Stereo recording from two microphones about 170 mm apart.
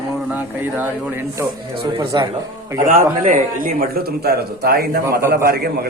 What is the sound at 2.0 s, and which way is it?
Speech, 25° right (ahead or behind).